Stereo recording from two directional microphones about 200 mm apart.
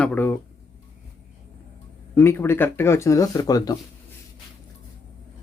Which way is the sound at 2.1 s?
10° left (ahead or behind).